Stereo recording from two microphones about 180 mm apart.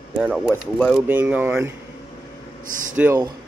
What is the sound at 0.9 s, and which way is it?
Speech, 10° right (ahead or behind).